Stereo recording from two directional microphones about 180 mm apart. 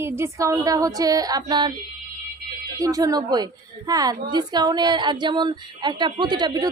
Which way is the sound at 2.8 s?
20° right (ahead or behind).